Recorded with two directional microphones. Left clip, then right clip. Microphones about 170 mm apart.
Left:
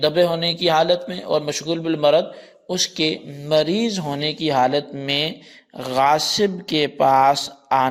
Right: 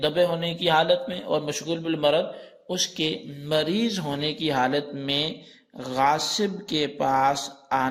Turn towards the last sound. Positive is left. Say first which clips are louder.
# left 6 dB
turn(degrees=35)  # may be behind; listen again after turning